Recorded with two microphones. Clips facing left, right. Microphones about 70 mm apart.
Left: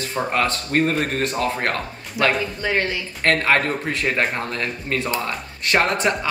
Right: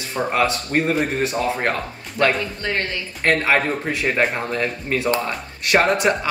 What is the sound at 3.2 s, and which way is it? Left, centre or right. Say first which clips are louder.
Speech: even; centre.